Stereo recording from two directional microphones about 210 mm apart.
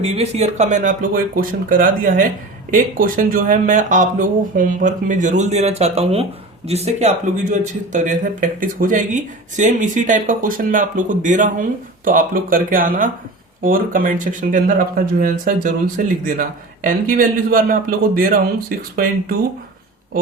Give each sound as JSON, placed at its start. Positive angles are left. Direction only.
{"t": 0.0, "sound": "a man's voice", "side_deg": -30}